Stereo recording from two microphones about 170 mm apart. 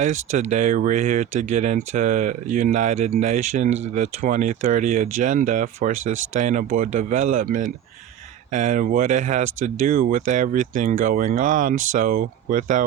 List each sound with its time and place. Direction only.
0.0 s speech: 45° right (ahead or behind)